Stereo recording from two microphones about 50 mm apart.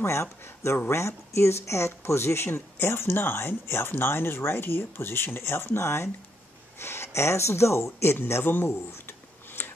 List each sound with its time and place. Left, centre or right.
0.0 s speech: left